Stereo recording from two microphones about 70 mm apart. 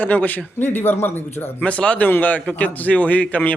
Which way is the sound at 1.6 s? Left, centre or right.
Centre.